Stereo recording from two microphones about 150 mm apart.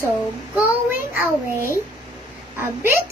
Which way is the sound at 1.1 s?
15° right (ahead or behind).